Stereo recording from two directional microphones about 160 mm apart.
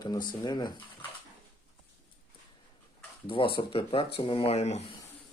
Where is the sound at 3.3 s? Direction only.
35° left (ahead or behind).